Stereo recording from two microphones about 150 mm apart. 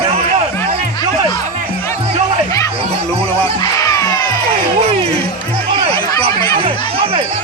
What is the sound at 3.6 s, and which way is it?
Music, 20° left (ahead or behind).